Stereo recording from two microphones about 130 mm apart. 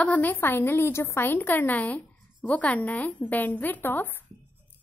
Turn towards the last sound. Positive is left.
turn(degrees=15)  # may be behind; listen again after turning